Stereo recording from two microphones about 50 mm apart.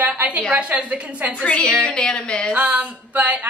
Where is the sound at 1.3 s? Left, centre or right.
Left.